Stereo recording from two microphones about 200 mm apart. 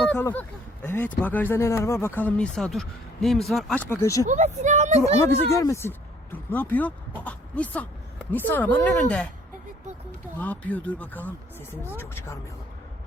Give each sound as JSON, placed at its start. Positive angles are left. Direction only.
{"t": 0.0, "sound": "a sound", "side_deg": 5}
{"t": 0.3, "sound": "speech", "side_deg": 10}
{"t": 4.3, "sound": "speech", "side_deg": -35}
{"t": 5.5, "sound": "speech", "side_deg": 15}
{"t": 10.3, "sound": "speech", "side_deg": 5}